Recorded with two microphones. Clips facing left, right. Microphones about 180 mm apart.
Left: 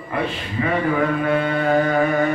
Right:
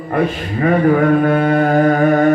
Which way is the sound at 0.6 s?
50° right (ahead or behind).